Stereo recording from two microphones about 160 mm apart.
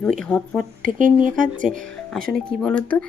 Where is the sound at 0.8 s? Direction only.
55° right (ahead or behind).